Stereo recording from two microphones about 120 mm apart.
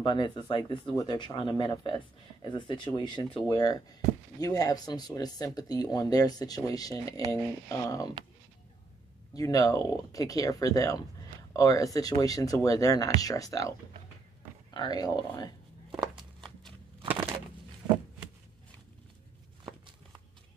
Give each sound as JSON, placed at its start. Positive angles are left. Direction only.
{"t": 0.0, "sound": "speech", "side_deg": 40}
{"t": 9.3, "sound": "speech", "side_deg": 30}